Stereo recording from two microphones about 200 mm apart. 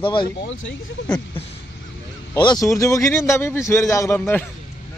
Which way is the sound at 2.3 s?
20° left (ahead or behind).